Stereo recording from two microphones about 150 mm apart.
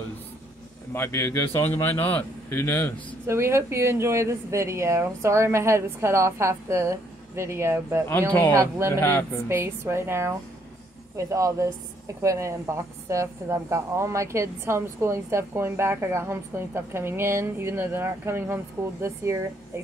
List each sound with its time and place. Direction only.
0.9 s speech: 20° left (ahead or behind)
3.3 s speech: 15° right (ahead or behind)
8.3 s speech: 10° left (ahead or behind)
8.5 s speech: 20° right (ahead or behind)
9.0 s speech: 15° left (ahead or behind)
9.5 s a woman's voice: 15° right (ahead or behind)